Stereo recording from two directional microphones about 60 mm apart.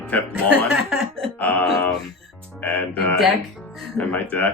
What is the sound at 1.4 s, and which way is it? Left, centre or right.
Speech, left.